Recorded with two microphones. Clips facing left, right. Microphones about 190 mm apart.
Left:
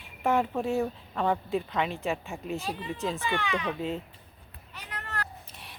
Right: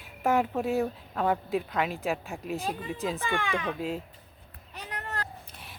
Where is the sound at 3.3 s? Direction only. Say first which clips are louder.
Even; 50° right (ahead or behind).